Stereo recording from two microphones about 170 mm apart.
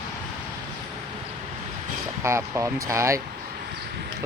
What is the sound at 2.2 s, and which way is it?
Speech, 15° right (ahead or behind).